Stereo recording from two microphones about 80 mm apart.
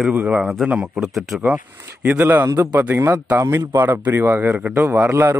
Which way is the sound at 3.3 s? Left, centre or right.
Right.